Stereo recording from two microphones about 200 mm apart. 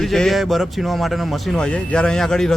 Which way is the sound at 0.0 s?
Centre (ahead or behind).